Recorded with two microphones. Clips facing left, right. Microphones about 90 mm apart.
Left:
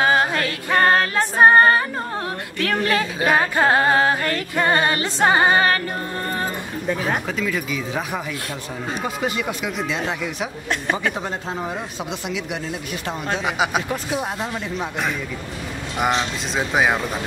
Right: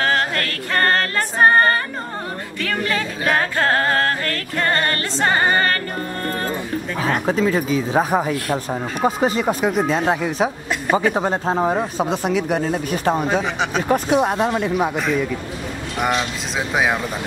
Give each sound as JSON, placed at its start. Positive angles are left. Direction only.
{"t": 0.0, "sound": "music", "side_deg": 15}
{"t": 2.6, "sound": "a sound", "side_deg": 5}
{"t": 7.2, "sound": "speech", "side_deg": -35}
{"t": 14.1, "sound": "speech", "side_deg": -65}
{"t": 16.5, "sound": "speech", "side_deg": 0}